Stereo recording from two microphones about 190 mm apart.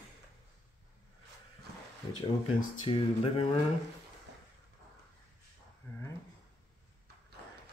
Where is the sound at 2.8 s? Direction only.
30° left (ahead or behind).